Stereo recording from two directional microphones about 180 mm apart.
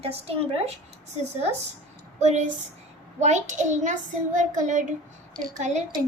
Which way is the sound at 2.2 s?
40° right (ahead or behind).